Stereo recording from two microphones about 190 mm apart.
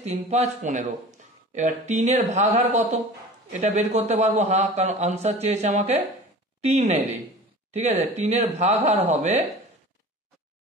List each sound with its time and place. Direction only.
0.0 s speech: 35° right (ahead or behind)